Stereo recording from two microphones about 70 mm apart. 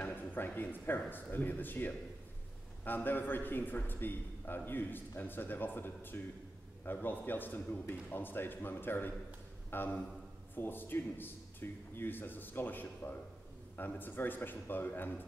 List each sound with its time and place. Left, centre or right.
0.0 s a man's voice: left